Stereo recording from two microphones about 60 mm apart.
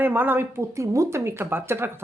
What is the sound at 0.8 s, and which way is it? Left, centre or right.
Speech, right.